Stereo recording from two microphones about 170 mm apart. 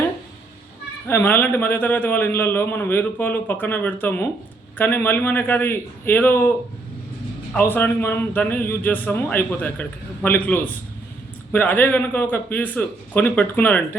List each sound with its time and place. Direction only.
1.0 s a man's voice: 10° left (ahead or behind)
7.5 s a man's voice: 10° left (ahead or behind)